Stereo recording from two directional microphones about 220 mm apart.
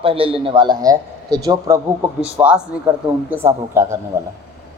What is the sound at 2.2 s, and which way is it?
A man's voice, 5° right (ahead or behind).